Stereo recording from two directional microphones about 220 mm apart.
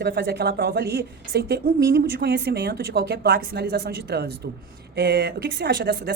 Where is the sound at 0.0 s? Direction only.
45° right (ahead or behind).